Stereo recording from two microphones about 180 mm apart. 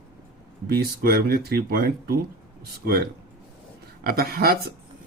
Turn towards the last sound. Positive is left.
turn(degrees=-55)  # may be behind; listen again after turning